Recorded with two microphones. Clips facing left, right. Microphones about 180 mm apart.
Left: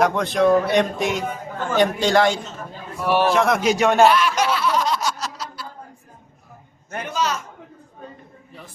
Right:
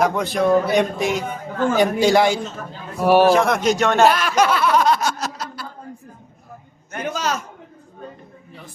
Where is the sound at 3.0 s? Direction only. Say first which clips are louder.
Right 6 dB; 40° right (ahead or behind).